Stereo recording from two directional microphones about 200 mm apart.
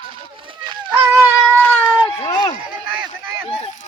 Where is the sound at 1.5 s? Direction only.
10° left (ahead or behind).